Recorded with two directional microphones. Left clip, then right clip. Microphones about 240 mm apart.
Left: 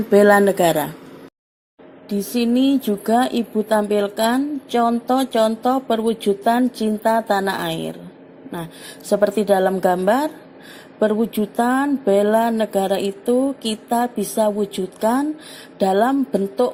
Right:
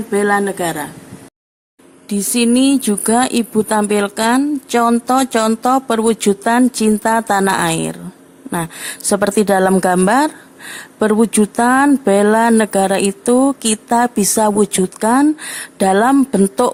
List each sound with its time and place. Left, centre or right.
0.1 s speech: centre
2.0 s speech: right